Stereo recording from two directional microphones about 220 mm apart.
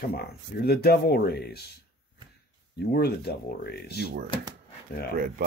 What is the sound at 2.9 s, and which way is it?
Speech, 45° left (ahead or behind).